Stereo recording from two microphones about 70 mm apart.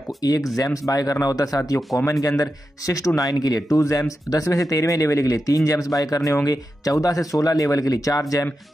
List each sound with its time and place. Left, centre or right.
0.2 s speech: left
3.2 s speech: left